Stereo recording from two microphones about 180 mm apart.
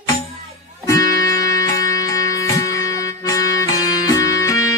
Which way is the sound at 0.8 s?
20° left (ahead or behind).